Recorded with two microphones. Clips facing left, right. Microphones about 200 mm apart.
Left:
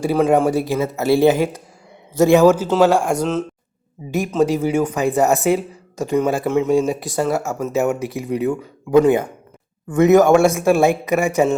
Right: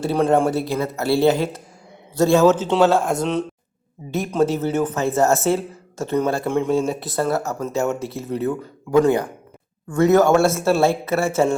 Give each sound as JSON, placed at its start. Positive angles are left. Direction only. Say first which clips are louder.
{"t": 0.0, "sound": "a man's voice", "louder": "left 2 dB", "side_deg": 10}
{"t": 0.7, "sound": "a man's voice", "louder": "left 3 dB", "side_deg": 20}
{"t": 4.5, "sound": "a man's voice", "louder": "left 3 dB", "side_deg": 10}
{"t": 7.2, "sound": "speech", "louder": "left 1 dB", "side_deg": 15}